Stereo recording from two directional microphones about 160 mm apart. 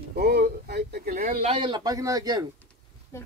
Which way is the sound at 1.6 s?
25° right (ahead or behind).